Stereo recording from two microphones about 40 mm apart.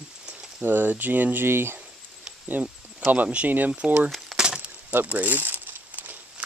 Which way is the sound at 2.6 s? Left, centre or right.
Right.